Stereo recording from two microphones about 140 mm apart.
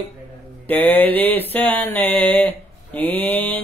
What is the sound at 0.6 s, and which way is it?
Mantra, 15° left (ahead or behind).